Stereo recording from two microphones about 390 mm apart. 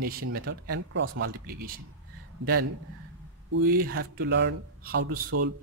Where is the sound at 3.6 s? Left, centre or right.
Right.